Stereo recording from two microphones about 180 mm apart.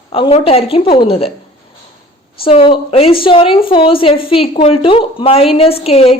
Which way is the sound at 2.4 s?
30° left (ahead or behind).